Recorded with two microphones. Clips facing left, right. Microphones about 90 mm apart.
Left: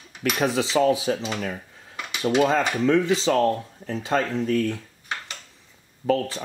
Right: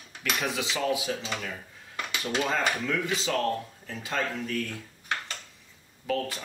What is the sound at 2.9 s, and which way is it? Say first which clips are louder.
Speech: left 9 dB; 30° left (ahead or behind).